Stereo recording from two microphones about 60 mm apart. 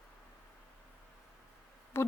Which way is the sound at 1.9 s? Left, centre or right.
Left.